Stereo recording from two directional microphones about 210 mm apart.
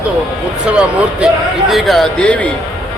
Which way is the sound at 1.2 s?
Centre (ahead or behind).